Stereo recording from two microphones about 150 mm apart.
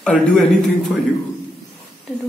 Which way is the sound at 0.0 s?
5° left (ahead or behind).